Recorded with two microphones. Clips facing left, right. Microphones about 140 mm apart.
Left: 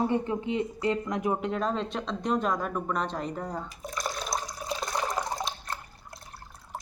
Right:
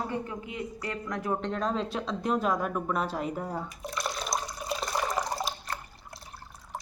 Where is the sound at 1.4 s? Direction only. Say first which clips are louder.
Left 1 dB; 5° left (ahead or behind).